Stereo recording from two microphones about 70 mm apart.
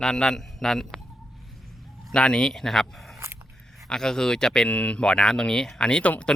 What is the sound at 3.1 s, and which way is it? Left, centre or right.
Scissors, right.